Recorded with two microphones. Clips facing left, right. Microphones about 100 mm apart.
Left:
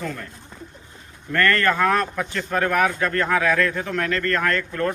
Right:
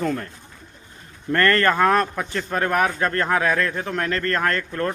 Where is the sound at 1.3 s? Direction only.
35° right (ahead or behind).